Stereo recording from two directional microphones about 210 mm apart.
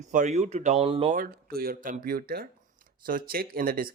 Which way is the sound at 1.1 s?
45° right (ahead or behind).